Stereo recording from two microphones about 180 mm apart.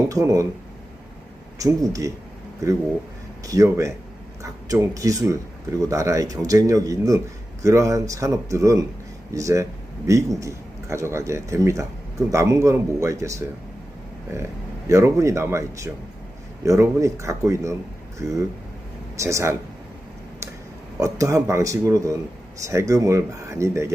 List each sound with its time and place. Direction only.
0.1 s a man's voice: 15° right (ahead or behind)
1.5 s speech: 20° right (ahead or behind)
3.4 s a man's voice: 20° right (ahead or behind)
21.0 s a man's voice: 15° right (ahead or behind)